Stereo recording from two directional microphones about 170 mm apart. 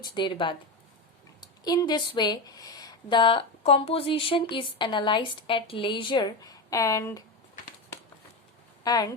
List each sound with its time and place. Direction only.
0.1 s speech: 30° left (ahead or behind)
8.8 s speech: 25° left (ahead or behind)